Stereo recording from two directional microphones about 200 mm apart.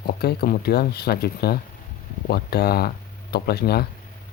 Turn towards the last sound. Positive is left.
turn(degrees=50)  # may be behind; listen again after turning